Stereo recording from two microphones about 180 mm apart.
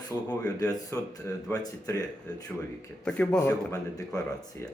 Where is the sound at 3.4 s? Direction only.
20° left (ahead or behind).